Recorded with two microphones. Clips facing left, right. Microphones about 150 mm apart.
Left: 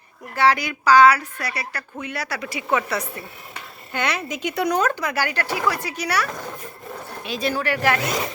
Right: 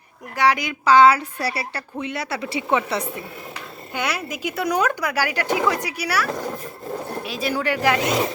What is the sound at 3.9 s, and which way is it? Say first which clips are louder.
Speech: left 1 dB; 5° right (ahead or behind).